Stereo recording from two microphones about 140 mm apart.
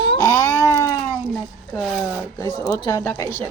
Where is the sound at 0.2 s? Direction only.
20° left (ahead or behind).